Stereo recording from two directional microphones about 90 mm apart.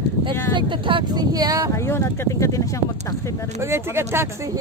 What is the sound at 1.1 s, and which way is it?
Speech, 50° right (ahead or behind).